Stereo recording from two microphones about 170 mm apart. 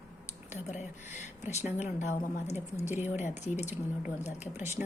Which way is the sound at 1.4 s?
45° left (ahead or behind).